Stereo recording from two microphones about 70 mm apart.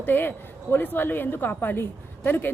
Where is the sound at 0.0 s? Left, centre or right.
Left.